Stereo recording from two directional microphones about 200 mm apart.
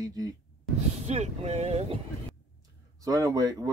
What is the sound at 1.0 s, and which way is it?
Speech, 35° right (ahead or behind).